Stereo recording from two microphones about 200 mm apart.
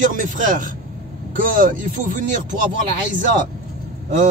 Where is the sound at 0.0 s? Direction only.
40° right (ahead or behind).